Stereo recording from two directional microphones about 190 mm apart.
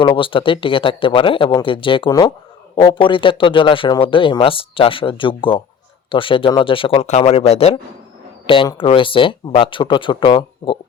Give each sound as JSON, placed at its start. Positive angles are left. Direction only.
{"t": 0.0, "sound": "speech", "side_deg": 25}